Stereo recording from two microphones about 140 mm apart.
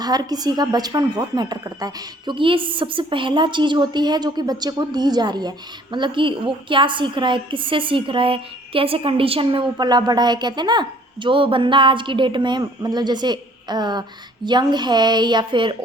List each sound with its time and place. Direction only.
0.0 s a woman's voice: 30° right (ahead or behind)